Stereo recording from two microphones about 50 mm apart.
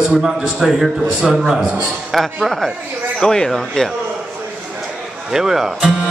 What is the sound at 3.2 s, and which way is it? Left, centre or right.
Speech, centre.